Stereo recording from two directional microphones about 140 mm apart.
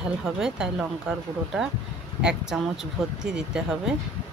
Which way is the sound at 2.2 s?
5° right (ahead or behind).